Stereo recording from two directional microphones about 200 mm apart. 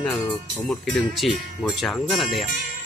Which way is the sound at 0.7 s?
Centre (ahead or behind).